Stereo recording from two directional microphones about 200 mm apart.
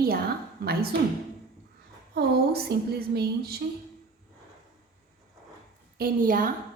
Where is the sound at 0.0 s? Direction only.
50° right (ahead or behind).